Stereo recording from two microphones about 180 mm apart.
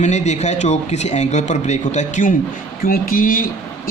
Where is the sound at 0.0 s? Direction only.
40° left (ahead or behind).